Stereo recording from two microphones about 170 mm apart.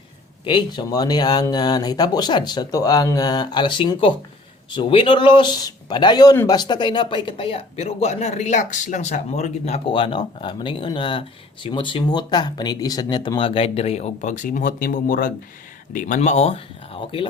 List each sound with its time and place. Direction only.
0.4 s speech: 30° left (ahead or behind)